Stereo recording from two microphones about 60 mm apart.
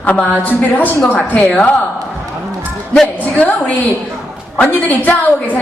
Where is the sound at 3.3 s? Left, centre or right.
Left.